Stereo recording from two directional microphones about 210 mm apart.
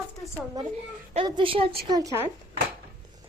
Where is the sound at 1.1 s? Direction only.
25° right (ahead or behind).